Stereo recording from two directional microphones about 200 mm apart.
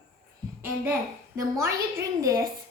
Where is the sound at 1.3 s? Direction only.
15° right (ahead or behind).